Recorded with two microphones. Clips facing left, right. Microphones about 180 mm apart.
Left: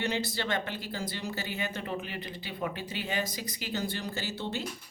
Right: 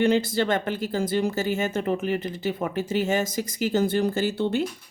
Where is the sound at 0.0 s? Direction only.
50° right (ahead or behind).